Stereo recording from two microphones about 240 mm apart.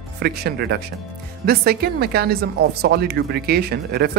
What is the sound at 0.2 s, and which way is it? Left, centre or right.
A woman's voice, right.